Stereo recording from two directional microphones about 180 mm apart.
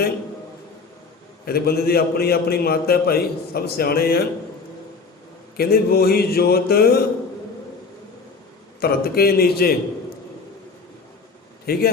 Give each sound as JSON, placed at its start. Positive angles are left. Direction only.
{"t": 1.5, "sound": "a man's voice", "side_deg": 60}
{"t": 5.5, "sound": "a man's voice", "side_deg": 60}
{"t": 8.8, "sound": "a man's voice", "side_deg": 60}
{"t": 11.6, "sound": "a man's voice", "side_deg": 55}